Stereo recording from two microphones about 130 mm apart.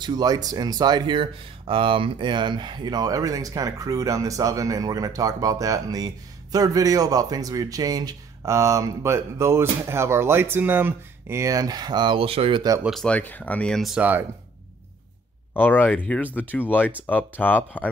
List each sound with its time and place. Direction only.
0.0 s speech: 30° right (ahead or behind)
13.0 s speech: 10° left (ahead or behind)
13.9 s speech: 15° right (ahead or behind)
15.5 s speech: 15° left (ahead or behind)